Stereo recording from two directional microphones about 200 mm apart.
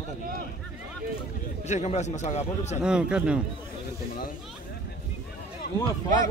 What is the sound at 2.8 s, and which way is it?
Speech, 5° right (ahead or behind).